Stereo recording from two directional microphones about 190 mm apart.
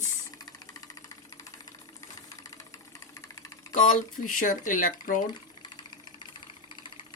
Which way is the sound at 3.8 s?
45° left (ahead or behind).